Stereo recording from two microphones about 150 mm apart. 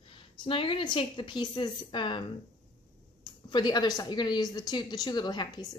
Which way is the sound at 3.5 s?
30° left (ahead or behind).